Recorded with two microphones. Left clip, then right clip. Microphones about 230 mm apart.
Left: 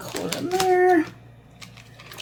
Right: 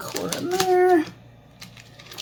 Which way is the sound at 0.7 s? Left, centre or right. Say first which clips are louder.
Even; right.